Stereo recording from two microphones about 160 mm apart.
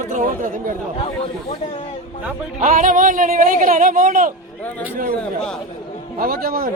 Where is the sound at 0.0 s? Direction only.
55° right (ahead or behind).